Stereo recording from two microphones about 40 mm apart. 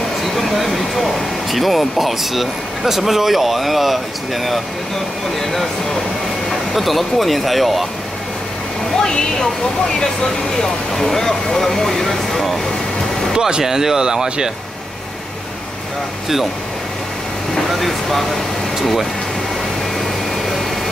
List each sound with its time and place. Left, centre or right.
0.2 s speech: centre
6.7 s speech: centre
9.0 s speech: centre
10.5 s speech: centre
13.3 s speech: centre
17.6 s speech: centre